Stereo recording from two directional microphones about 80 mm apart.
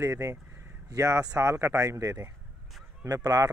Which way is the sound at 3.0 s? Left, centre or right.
Right.